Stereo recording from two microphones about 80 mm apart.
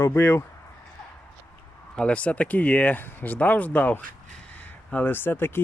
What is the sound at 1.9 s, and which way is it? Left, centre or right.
Speech, centre.